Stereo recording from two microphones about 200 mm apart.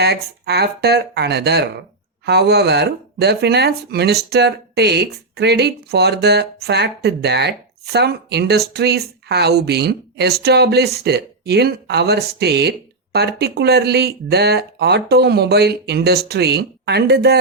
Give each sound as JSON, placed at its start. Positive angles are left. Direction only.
{"t": 0.0, "sound": "speech", "side_deg": -55}